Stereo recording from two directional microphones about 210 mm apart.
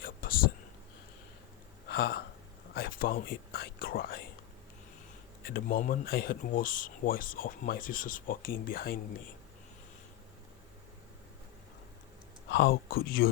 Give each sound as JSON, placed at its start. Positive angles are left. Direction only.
{"t": 0.0, "sound": "a sound", "side_deg": 45}
{"t": 1.9, "sound": "speech", "side_deg": 45}
{"t": 2.7, "sound": "whispering", "side_deg": 45}
{"t": 5.4, "sound": "speech", "side_deg": 45}
{"t": 12.5, "sound": "speech", "side_deg": 50}